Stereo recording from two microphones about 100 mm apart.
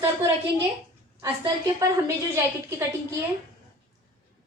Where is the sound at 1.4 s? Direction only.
35° right (ahead or behind).